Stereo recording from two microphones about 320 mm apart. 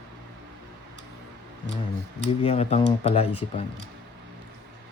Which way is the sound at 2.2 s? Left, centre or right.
Centre.